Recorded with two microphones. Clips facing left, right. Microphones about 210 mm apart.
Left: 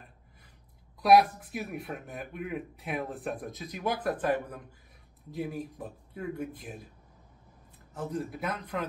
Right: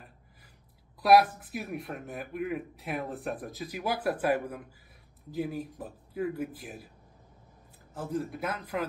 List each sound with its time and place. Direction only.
1.0 s speech: centre (ahead or behind)
7.9 s speech: centre (ahead or behind)